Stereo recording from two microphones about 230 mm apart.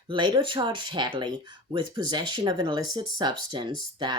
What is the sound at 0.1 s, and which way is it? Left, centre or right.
Speech, right.